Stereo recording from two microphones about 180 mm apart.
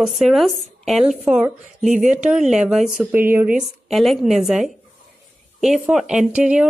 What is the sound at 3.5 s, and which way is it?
A woman's voice, centre (ahead or behind).